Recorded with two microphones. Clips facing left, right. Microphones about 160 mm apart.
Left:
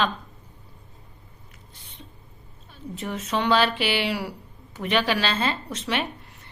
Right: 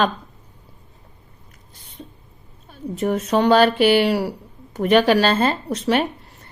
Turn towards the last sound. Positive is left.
turn(degrees=-45)  # may be behind; listen again after turning